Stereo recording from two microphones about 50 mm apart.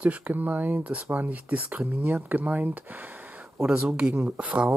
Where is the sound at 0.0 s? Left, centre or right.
Right.